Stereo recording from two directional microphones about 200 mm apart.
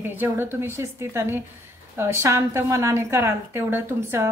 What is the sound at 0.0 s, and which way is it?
A woman's voice, 10° right (ahead or behind).